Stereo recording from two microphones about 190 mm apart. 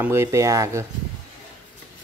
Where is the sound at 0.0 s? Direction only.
15° right (ahead or behind).